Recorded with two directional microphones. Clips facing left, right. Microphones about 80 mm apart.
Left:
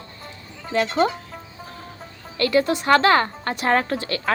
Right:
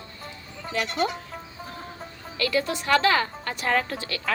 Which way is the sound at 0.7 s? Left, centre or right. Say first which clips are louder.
Left 6 dB; left.